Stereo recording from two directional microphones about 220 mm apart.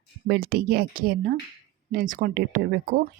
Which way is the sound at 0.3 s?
45° right (ahead or behind).